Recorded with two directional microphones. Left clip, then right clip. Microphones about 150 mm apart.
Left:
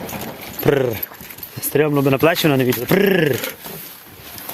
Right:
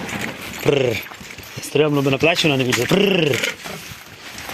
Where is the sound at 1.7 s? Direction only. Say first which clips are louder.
Left 1 dB; 45° left (ahead or behind).